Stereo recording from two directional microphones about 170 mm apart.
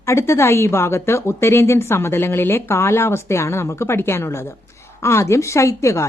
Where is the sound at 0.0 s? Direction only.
15° left (ahead or behind).